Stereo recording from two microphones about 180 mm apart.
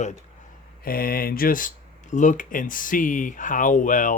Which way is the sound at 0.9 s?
55° left (ahead or behind).